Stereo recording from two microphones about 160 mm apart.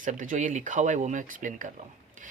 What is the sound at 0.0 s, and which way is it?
Speech, 55° right (ahead or behind).